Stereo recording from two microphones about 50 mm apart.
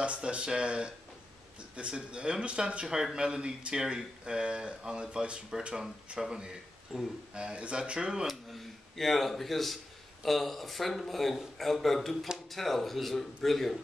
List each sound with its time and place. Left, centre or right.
0.0 s speech: right
6.1 s speech: centre
8.3 s a man's voice: centre